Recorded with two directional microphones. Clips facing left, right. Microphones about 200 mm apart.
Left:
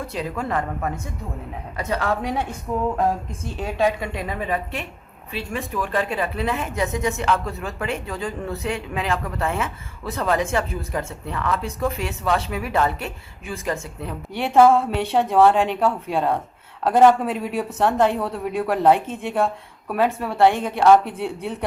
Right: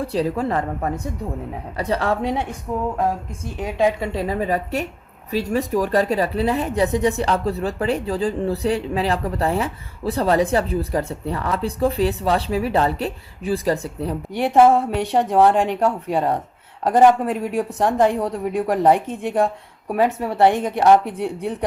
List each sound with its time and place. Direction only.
0.0 s a woman's voice: 35° right (ahead or behind)
3.4 s a woman's voice: 15° right (ahead or behind); by 14.2 s 35° right (ahead or behind)
14.3 s speech: 15° right (ahead or behind)
16.8 s speech: 15° right (ahead or behind)